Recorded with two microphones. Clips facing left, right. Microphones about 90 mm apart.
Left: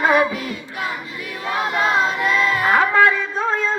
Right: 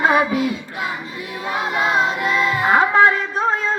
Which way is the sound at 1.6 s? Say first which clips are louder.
Even; 15° right (ahead or behind).